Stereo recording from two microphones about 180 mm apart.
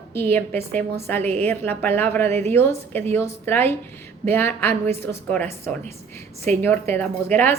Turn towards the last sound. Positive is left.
turn(degrees=10)  # may be behind; listen again after turning